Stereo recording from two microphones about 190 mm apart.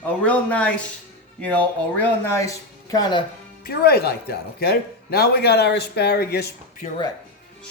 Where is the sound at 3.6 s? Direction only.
55° left (ahead or behind).